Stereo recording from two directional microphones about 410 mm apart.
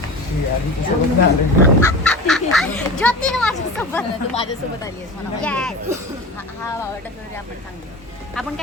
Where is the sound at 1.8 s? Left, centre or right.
Centre.